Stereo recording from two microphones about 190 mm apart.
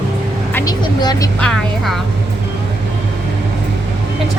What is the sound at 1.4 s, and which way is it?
Speech, centre (ahead or behind).